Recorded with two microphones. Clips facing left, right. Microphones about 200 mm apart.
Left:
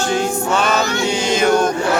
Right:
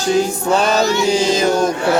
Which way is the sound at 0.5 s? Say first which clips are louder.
Right 4 dB; 35° right (ahead or behind).